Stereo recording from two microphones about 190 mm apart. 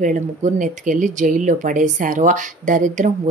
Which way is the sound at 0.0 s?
40° right (ahead or behind).